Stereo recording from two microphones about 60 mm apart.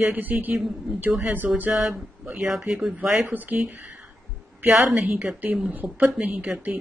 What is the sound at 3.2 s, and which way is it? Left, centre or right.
Speech, right.